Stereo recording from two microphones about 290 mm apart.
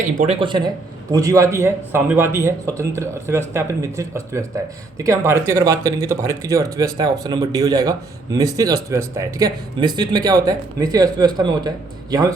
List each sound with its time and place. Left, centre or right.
0.0 s a man's voice: right